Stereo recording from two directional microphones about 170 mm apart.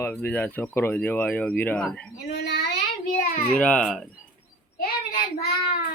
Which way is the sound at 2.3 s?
75° left (ahead or behind).